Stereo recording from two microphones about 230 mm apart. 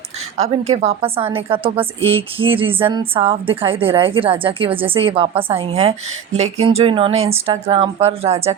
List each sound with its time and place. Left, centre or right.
0.3 s a woman's voice: right